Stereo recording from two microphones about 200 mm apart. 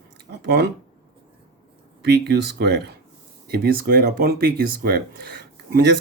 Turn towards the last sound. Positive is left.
turn(degrees=-55)  # may be behind; listen again after turning